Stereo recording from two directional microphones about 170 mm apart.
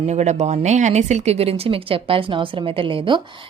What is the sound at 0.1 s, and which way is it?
Speech, 40° right (ahead or behind).